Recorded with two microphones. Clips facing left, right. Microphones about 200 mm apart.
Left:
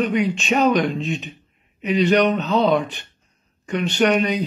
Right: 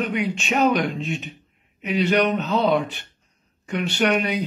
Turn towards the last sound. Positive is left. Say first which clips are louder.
# left 3 dB
turn(degrees=-10)  # may be behind; listen again after turning